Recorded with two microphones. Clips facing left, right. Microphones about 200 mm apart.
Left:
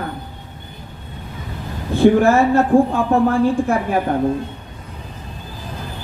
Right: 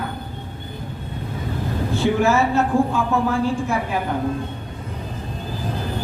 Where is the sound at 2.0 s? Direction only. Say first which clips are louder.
Left 7 dB; 55° left (ahead or behind).